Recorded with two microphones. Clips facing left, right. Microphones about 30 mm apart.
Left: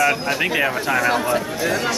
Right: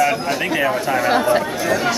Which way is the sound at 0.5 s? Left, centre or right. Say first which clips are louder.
Right 3 dB; centre.